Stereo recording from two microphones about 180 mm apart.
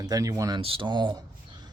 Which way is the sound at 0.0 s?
20° right (ahead or behind).